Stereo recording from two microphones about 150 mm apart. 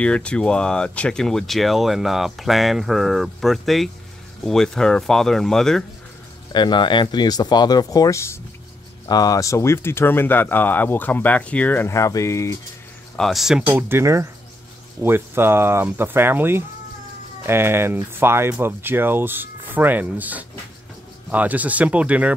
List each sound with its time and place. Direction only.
0.0 s speech: 5° left (ahead or behind)
6.5 s speech: 30° left (ahead or behind)
13.1 s speech: centre (ahead or behind)